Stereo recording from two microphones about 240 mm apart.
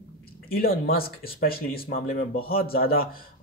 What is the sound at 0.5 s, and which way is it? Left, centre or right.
Speech, left.